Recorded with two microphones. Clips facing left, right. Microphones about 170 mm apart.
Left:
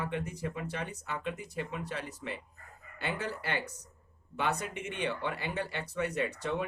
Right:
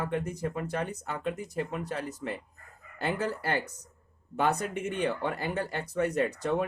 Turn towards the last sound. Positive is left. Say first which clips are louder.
# right 5 dB
turn(degrees=-45)  # may be behind; listen again after turning